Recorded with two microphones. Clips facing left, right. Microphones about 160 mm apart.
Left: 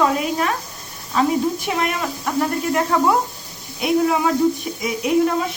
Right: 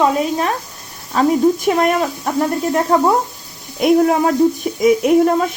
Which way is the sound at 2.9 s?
30° right (ahead or behind).